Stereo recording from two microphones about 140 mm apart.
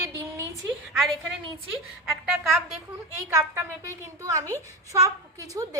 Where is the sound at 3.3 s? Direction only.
20° right (ahead or behind).